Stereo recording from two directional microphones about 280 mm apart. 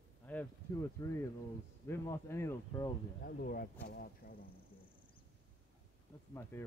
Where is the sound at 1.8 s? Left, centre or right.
Centre.